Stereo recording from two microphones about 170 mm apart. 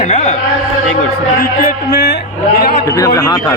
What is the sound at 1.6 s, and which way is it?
Speech, 65° left (ahead or behind).